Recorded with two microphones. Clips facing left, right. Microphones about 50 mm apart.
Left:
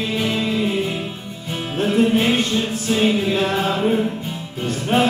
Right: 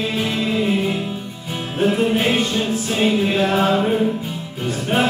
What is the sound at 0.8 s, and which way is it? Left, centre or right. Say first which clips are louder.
Music: right 2 dB; centre.